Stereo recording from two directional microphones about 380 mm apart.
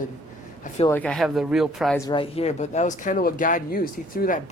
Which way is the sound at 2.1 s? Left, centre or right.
Centre.